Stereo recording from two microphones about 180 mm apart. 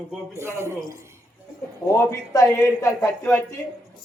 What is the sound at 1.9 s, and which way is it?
A man's voice, 15° left (ahead or behind).